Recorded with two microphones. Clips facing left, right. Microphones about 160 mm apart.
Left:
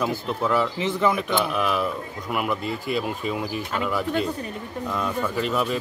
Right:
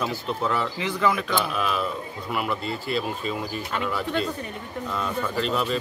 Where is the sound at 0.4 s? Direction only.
5° left (ahead or behind).